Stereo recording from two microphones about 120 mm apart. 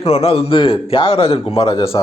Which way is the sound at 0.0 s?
60° left (ahead or behind).